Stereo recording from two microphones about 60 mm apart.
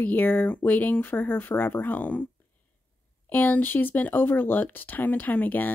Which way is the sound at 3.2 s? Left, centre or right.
Left.